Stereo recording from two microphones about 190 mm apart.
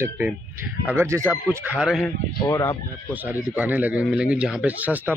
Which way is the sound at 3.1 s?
10° right (ahead or behind).